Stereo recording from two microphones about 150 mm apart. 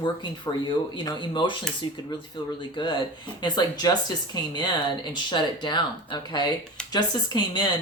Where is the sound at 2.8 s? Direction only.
30° left (ahead or behind).